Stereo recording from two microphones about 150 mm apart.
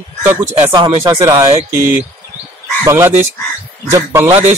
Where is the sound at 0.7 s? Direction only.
35° right (ahead or behind).